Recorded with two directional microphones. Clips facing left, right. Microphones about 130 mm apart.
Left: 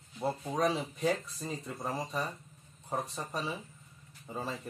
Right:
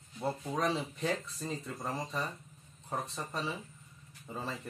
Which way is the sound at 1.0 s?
20° left (ahead or behind).